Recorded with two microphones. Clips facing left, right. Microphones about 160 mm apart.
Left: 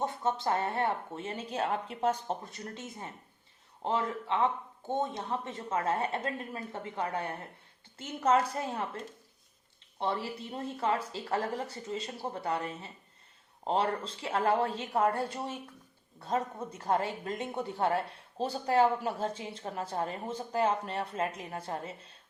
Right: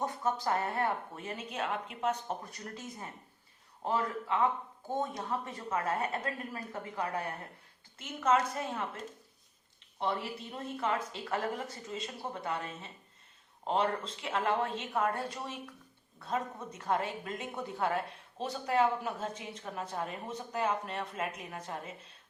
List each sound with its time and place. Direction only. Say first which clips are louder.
0.0 s a woman's voice: left 2 dB; 25° left (ahead or behind)
10.0 s a woman's voice: left 1 dB; 30° left (ahead or behind)